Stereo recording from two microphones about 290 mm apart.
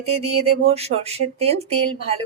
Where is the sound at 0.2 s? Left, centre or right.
Right.